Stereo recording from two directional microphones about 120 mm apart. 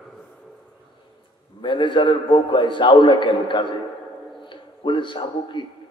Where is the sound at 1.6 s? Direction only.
45° left (ahead or behind).